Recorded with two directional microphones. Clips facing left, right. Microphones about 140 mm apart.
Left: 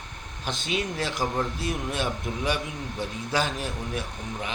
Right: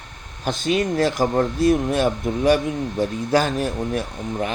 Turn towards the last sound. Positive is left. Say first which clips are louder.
# right 8 dB
turn(degrees=-45)  # may be behind; listen again after turning